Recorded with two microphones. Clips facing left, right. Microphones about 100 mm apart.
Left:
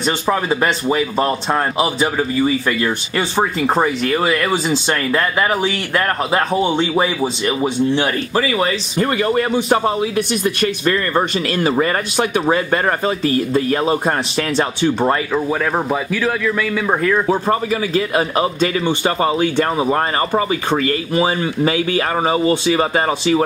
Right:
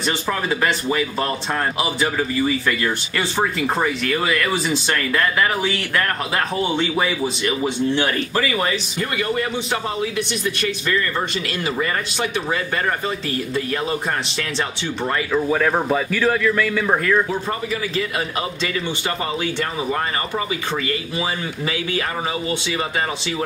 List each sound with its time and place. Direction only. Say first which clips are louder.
0.0 s speech: left 5 dB; 30° left (ahead or behind)
8.9 s a man's voice: left 6 dB; 40° left (ahead or behind)
16.2 s speech: even; 5° left (ahead or behind)
17.3 s a man's voice: left 7 dB; 45° left (ahead or behind)